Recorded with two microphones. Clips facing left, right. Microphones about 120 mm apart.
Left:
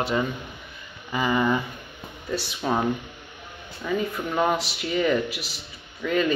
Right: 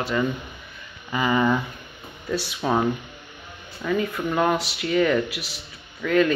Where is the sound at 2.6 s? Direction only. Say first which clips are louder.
Right 2 dB; 5° right (ahead or behind).